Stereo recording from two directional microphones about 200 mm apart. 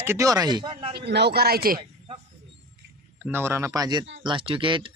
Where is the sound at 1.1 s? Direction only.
55° right (ahead or behind).